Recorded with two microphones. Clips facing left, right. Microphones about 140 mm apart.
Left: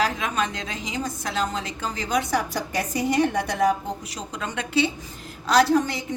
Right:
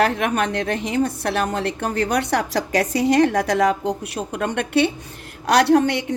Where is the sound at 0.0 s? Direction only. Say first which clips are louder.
Right 5 dB; 60° right (ahead or behind).